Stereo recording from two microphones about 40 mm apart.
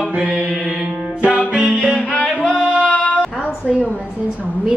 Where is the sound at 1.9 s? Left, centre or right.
Left.